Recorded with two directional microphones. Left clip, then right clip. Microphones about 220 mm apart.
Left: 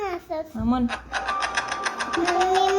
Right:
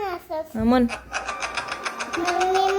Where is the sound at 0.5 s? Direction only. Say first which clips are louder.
Right 7 dB; 50° right (ahead or behind).